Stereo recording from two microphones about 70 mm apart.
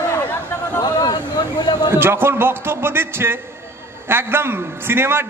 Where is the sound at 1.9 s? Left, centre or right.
Right.